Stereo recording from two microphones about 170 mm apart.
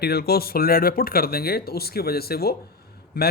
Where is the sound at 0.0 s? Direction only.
65° left (ahead or behind).